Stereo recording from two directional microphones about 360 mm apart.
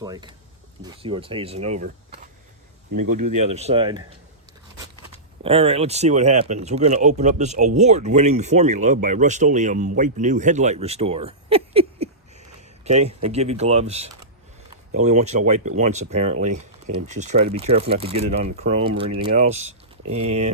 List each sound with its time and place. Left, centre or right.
0.0 s speech: centre
3.2 s speech: right
3.5 s speech: centre